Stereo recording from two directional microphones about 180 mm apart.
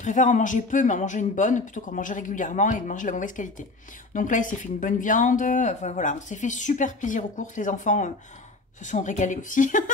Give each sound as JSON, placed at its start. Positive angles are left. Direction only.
{"t": 0.0, "sound": "speech", "side_deg": 45}